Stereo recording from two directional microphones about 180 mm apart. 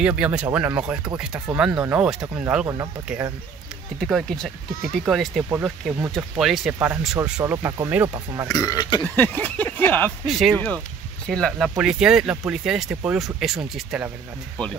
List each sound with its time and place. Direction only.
0.0 s speech: 5° right (ahead or behind)
7.5 s speech: 20° right (ahead or behind)
8.5 s speech: 20° left (ahead or behind)
9.0 s speech: 10° left (ahead or behind)
10.2 s speech: centre (ahead or behind)
14.6 s speech: 5° left (ahead or behind)